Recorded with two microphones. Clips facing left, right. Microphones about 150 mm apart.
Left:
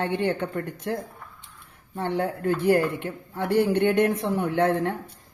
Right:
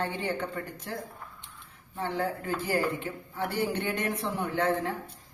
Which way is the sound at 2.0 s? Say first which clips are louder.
Left 5 dB; 60° left (ahead or behind).